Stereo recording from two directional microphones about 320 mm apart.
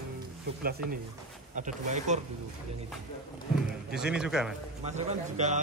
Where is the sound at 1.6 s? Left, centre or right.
Right.